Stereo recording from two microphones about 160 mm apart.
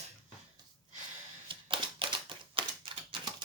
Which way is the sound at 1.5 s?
30° right (ahead or behind).